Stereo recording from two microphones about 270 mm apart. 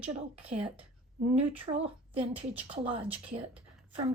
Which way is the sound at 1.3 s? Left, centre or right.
Right.